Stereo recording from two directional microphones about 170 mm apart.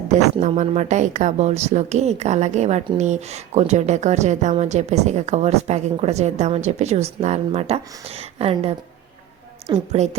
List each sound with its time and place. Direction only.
0.1 s a woman's voice: 45° right (ahead or behind)
9.7 s a woman's voice: 40° right (ahead or behind)